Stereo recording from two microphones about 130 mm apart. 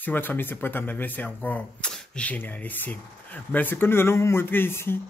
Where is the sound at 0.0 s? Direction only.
15° left (ahead or behind).